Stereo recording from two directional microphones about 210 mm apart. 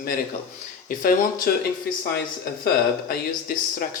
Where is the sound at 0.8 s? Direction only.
40° left (ahead or behind).